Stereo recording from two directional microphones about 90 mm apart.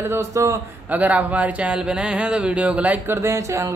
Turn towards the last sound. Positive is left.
turn(degrees=-35)  # may be behind; listen again after turning